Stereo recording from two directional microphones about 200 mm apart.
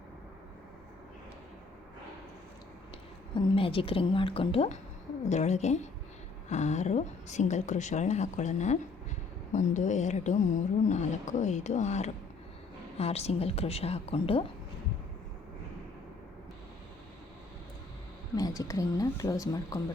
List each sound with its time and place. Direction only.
3.3 s a woman's voice: 25° left (ahead or behind)
18.3 s speech: 15° left (ahead or behind)